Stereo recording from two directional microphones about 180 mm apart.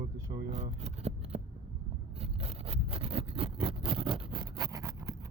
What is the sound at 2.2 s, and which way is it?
Vehicle, 35° right (ahead or behind).